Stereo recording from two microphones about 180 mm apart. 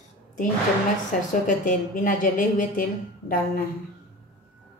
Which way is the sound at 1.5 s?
45° left (ahead or behind).